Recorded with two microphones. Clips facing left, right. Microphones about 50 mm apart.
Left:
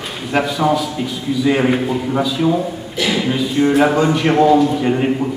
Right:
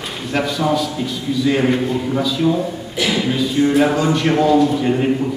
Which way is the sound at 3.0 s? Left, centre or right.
Centre.